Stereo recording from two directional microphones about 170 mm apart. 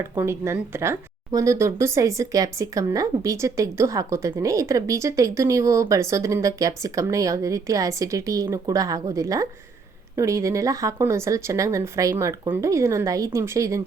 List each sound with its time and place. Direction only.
0.2 s speech: 15° right (ahead or behind)